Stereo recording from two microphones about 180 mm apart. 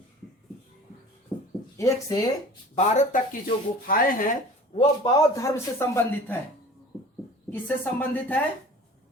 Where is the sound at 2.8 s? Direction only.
45° left (ahead or behind).